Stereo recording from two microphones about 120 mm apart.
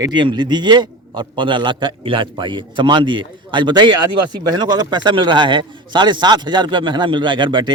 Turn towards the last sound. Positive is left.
turn(degrees=-40)  # may be behind; listen again after turning